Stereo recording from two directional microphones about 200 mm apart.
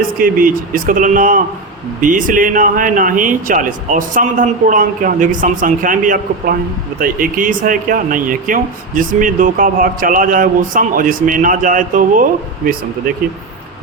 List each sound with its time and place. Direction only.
0.2 s speech: 45° right (ahead or behind)